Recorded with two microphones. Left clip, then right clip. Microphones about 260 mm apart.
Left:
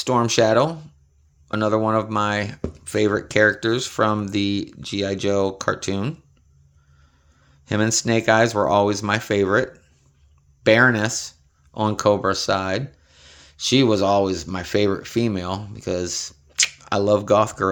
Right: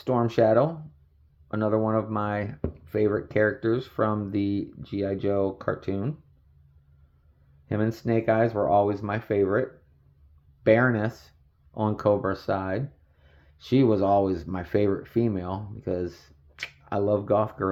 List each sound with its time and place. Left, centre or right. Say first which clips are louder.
0.0 s speech: left 4 dB; centre
7.7 s speech: left 6 dB; centre